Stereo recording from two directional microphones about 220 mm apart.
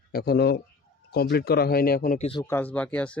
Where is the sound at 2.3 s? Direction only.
15° left (ahead or behind).